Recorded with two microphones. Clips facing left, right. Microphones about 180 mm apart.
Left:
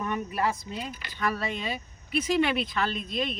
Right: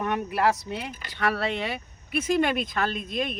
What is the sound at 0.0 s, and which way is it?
Speech, 75° right (ahead or behind).